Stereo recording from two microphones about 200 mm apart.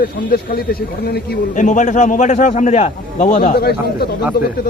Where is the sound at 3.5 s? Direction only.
50° left (ahead or behind).